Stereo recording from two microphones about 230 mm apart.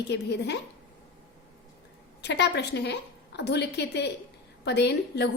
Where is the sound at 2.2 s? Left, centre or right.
Left.